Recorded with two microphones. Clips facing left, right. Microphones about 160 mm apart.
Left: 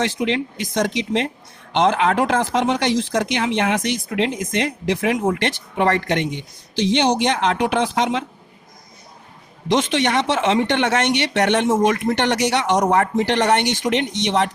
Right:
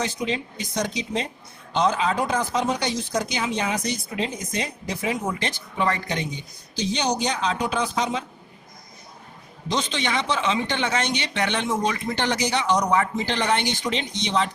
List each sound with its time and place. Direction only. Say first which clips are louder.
0.0 s speech: left 6 dB; 80° left
5.2 s speech: left 7 dB; 65° left (ahead or behind)
6.8 s speech: left 7 dB; 90° left
9.6 s speech: left 8 dB; 80° left
12.8 s speech: left 5 dB; 55° left (ahead or behind)